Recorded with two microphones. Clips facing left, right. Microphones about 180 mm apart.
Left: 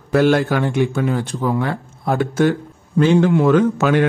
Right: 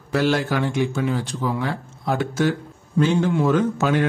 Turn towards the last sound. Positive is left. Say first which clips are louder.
# left 5 dB
turn(degrees=70)  # may be behind; listen again after turning